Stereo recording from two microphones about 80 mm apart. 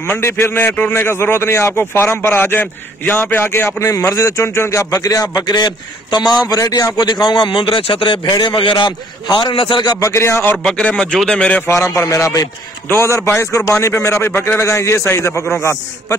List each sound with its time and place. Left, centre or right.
0.2 s a man's voice: left
3.8 s a man's voice: left
5.0 s a man's voice: left
5.5 s a man's voice: left
6.5 s a man's voice: left
7.0 s a man's voice: left
9.9 s a man's voice: left
10.6 s speech: centre
11.6 s a man's voice: left